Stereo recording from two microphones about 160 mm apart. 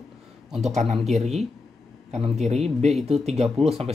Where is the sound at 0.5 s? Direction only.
45° right (ahead or behind).